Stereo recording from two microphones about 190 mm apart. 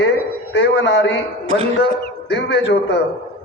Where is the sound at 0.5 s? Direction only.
70° left (ahead or behind).